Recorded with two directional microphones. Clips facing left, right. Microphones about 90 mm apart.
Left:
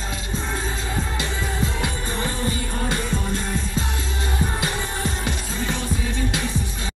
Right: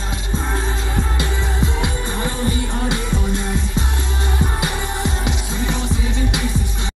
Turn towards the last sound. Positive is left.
turn(degrees=-20)  # may be behind; listen again after turning